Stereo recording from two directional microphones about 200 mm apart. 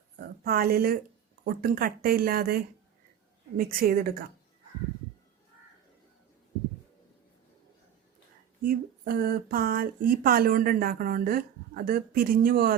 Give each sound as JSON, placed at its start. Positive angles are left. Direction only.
{"t": 0.2, "sound": "a woman's voice", "side_deg": -50}
{"t": 8.6, "sound": "speech", "side_deg": -50}